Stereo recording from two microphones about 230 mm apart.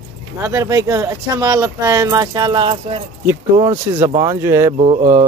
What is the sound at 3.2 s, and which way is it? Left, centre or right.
Speech, centre.